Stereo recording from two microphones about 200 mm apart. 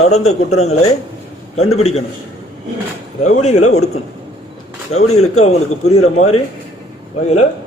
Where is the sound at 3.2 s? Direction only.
35° left (ahead or behind).